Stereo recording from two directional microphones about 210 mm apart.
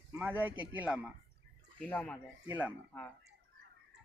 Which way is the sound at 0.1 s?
10° right (ahead or behind).